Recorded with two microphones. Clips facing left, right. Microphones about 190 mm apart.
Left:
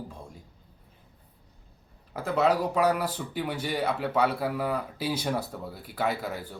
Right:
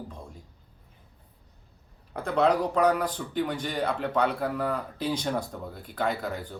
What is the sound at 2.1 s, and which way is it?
Speech, 5° left (ahead or behind).